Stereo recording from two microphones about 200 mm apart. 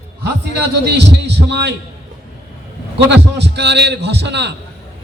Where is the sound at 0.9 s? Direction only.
55° right (ahead or behind).